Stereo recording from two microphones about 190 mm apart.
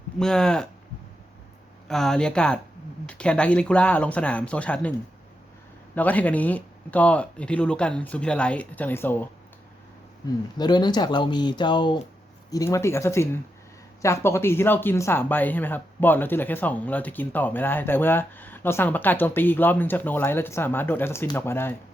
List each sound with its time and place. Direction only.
0.2 s speech: 5° left (ahead or behind)
1.9 s speech: centre (ahead or behind)
10.6 s speech: 20° left (ahead or behind)